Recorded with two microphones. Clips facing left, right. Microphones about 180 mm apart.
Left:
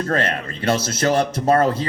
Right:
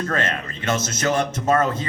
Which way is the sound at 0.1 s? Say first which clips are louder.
Left 3 dB; 30° left (ahead or behind).